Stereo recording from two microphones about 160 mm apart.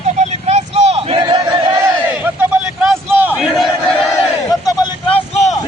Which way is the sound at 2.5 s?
5° right (ahead or behind).